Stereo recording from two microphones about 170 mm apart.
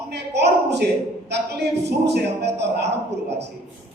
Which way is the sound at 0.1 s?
80° right.